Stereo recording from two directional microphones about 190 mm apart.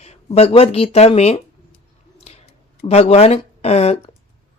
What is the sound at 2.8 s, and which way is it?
A woman's voice, 35° left (ahead or behind).